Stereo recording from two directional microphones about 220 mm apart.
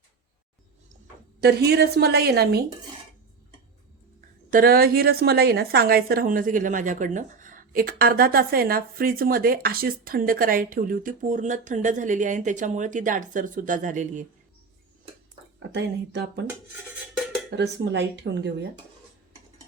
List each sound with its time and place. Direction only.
1.4 s a woman's voice: 45° right (ahead or behind)
4.5 s a woman's voice: 40° right (ahead or behind)
15.7 s a woman's voice: 50° right (ahead or behind)
17.5 s a woman's voice: 55° right (ahead or behind)